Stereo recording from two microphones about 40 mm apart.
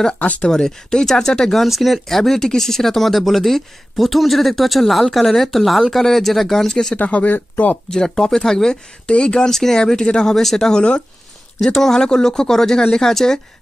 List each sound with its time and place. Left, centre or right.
0.4 s speech: centre
1.6 s speech: centre
7.0 s speech: left
7.9 s speech: centre
9.0 s speech: left
9.5 s speech: centre